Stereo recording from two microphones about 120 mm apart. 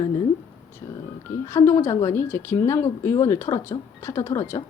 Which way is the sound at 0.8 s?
35° left (ahead or behind).